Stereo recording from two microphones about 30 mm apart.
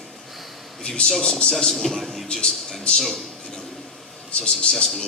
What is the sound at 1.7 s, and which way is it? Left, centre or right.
Speech, centre.